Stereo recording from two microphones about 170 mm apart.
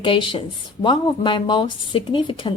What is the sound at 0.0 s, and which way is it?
Speech, 30° left (ahead or behind).